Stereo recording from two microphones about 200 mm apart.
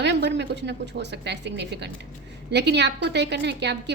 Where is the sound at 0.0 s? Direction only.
60° right (ahead or behind).